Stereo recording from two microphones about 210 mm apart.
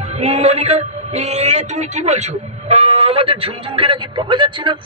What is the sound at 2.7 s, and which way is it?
A man's voice, 30° right (ahead or behind).